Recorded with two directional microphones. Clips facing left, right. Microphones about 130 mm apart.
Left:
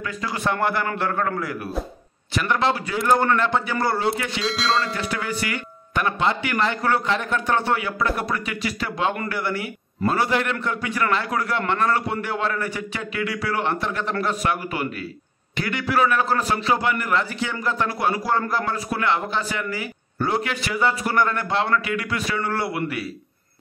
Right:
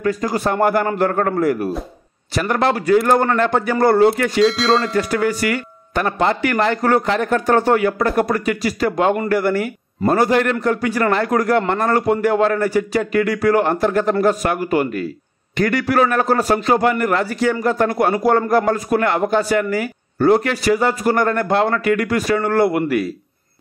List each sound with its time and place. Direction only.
0.0 s a man's voice: 40° right (ahead or behind)
4.5 s speech: centre (ahead or behind)
4.9 s a man's voice: 40° right (ahead or behind)